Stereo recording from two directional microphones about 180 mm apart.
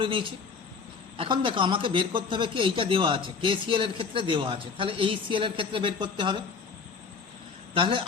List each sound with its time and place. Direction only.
0.0 s speech: 30° right (ahead or behind)
7.7 s speech: 30° right (ahead or behind)